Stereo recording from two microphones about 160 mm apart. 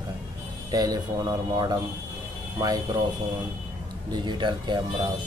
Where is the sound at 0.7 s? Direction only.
25° right (ahead or behind).